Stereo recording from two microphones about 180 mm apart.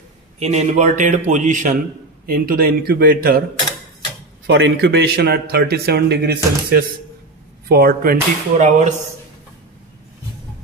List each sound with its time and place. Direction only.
0.4 s speech: 40° right (ahead or behind)
2.2 s a man's voice: 55° right (ahead or behind)
4.5 s a man's voice: 80° right; by 8.9 s 40° right (ahead or behind)